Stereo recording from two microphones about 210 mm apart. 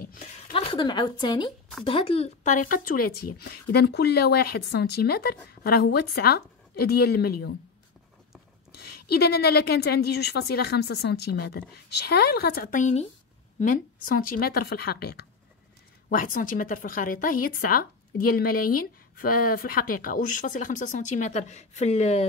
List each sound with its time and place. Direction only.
0.0 s a sound: 40° left (ahead or behind)
0.5 s a woman's voice: 25° left (ahead or behind); by 7.5 s 50° left (ahead or behind)
8.7 s speech: 50° left (ahead or behind); by 22.2 s 30° left (ahead or behind)